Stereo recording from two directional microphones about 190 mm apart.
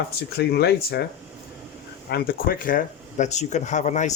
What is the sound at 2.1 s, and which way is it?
Speech, 50° left (ahead or behind).